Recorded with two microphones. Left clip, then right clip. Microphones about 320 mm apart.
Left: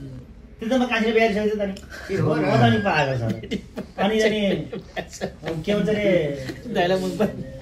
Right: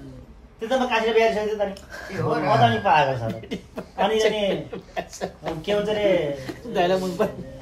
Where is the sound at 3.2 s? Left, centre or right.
Right.